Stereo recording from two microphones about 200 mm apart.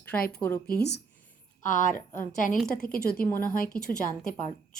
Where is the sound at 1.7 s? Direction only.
40° left (ahead or behind).